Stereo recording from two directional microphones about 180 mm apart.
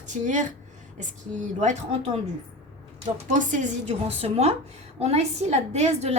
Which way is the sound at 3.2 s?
45° right (ahead or behind).